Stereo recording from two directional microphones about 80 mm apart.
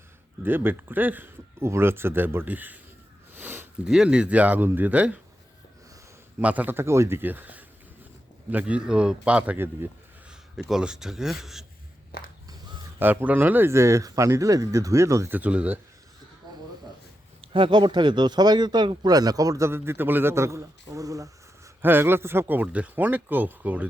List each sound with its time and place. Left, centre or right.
0.4 s speech: right
1.5 s speech: right
3.3 s sniff: right
3.8 s speech: centre
6.4 s speech: centre
6.7 s speech: right; by 11.6 s centre
13.0 s speech: right
15.3 s speech: centre
17.5 s speech: right
21.8 s speech: right